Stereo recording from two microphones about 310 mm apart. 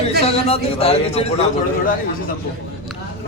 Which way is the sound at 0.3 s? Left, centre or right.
Centre.